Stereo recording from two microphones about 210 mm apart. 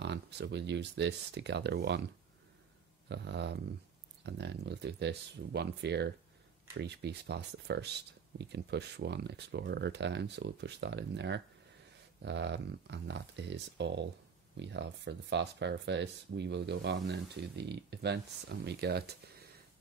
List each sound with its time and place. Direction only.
0.0 s speech: 55° right (ahead or behind)
3.1 s speech: 55° right (ahead or behind)